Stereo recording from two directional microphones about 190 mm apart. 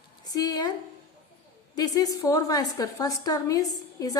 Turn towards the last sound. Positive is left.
turn(degrees=20)  # may be behind; listen again after turning